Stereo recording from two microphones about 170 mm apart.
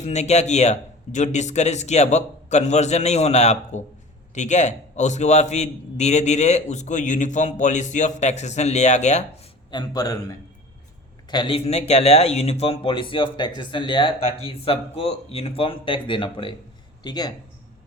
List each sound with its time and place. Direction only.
0.0 s a man's voice: 40° left (ahead or behind)
9.7 s a man's voice: 20° left (ahead or behind)